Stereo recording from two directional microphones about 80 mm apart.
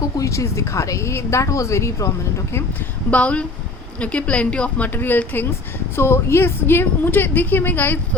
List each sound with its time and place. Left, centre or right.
0.0 s a woman's voice: left
3.1 s a woman's voice: centre
4.9 s a woman's voice: left